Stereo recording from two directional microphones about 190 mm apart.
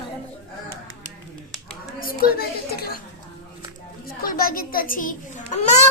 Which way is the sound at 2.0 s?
50° left (ahead or behind).